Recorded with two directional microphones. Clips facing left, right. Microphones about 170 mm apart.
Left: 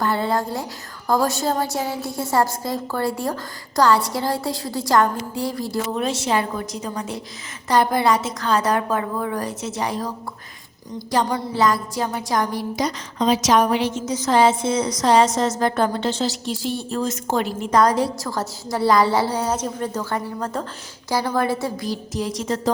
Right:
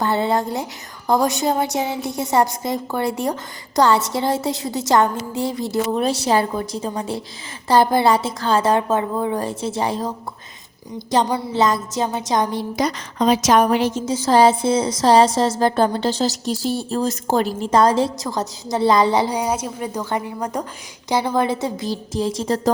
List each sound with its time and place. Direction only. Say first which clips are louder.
0.0 s a woman's voice: right 2 dB; 25° right (ahead or behind)
6.0 s a woman's voice: right 2 dB; 35° right (ahead or behind)
12.7 s a woman's voice: right 2 dB; 60° right (ahead or behind)
14.0 s a woman's voice: right 3 dB; 30° right (ahead or behind)